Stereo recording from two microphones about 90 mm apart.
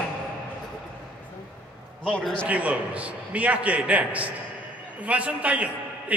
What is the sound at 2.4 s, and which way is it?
A man's voice, 15° right (ahead or behind).